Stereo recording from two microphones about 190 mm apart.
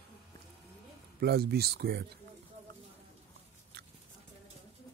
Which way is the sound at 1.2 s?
60° right (ahead or behind).